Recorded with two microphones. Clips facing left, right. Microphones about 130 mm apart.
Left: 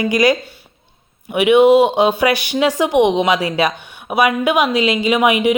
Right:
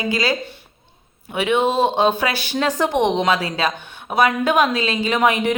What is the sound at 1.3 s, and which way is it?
Speech, 15° left (ahead or behind).